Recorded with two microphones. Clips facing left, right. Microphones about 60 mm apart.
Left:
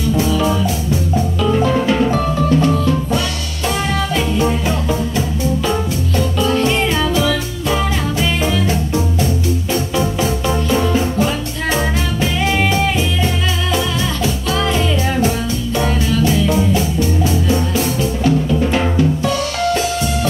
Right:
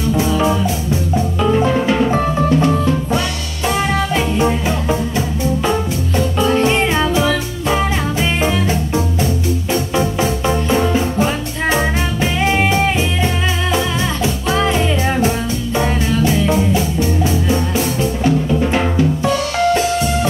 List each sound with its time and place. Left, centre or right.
0.2 s music: right
18.2 s drum: right